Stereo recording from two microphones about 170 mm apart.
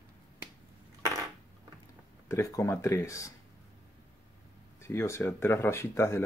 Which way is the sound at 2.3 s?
15° left (ahead or behind).